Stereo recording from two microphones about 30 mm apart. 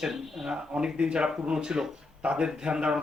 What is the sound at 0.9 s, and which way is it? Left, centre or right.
Speech, right.